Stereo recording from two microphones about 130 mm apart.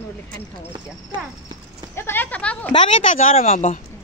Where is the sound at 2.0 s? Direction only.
15° left (ahead or behind).